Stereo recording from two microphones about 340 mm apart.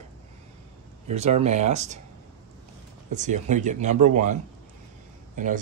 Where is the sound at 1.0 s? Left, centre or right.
Centre.